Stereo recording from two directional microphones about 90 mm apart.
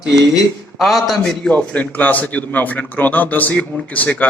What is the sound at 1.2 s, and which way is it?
A man's voice, 10° left (ahead or behind).